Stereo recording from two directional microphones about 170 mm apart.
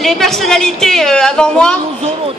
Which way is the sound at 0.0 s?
Centre (ahead or behind).